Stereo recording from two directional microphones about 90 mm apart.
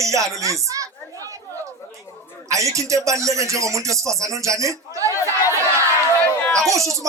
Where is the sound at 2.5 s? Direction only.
35° right (ahead or behind).